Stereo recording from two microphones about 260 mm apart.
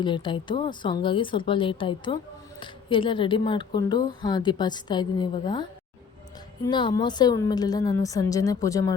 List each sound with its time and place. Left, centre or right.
0.0 s a woman's voice: centre
6.7 s a woman's voice: centre